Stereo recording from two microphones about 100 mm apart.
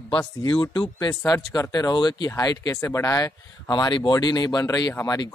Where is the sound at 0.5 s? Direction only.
45° left (ahead or behind).